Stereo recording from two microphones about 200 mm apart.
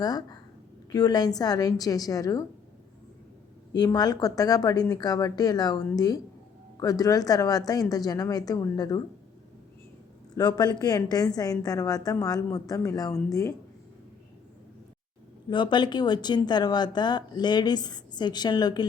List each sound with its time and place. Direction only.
0.0 s speech: 20° left (ahead or behind)
3.7 s speech: 20° left (ahead or behind)
10.3 s a woman's voice: 20° left (ahead or behind)
15.4 s speech: 25° left (ahead or behind)